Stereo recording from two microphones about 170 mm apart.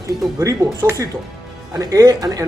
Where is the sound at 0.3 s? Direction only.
20° right (ahead or behind).